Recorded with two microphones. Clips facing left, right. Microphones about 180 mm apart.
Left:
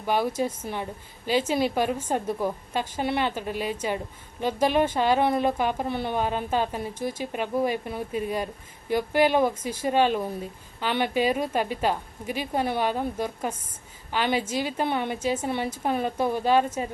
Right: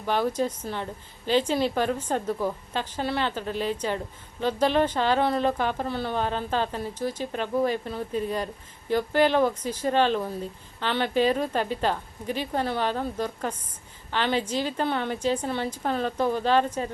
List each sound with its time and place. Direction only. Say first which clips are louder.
0.0 s a woman's voice: even; 10° left (ahead or behind)